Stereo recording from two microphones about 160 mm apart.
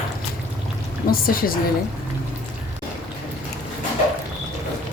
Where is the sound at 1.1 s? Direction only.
65° left (ahead or behind).